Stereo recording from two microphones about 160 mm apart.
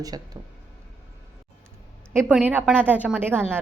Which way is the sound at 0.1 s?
25° right (ahead or behind).